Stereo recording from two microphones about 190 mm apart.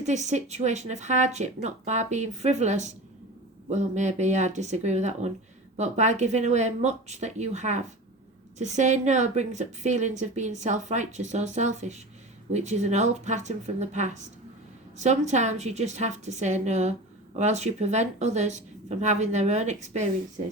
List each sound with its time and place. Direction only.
0.0 s a woman's voice: 35° right (ahead or behind)